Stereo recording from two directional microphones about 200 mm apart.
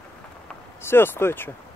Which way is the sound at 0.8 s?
10° left (ahead or behind).